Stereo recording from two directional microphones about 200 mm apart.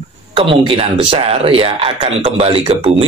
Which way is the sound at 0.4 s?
30° right (ahead or behind).